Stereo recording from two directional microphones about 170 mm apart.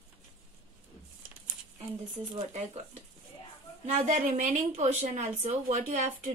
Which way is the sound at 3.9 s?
50° right (ahead or behind).